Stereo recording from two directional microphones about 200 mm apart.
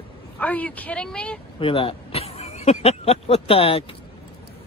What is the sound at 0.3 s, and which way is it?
Speech, 5° left (ahead or behind).